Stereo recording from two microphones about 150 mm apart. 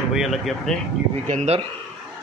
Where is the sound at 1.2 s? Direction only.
50° right (ahead or behind).